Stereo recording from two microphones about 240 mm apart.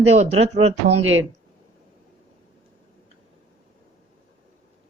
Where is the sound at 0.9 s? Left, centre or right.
Right.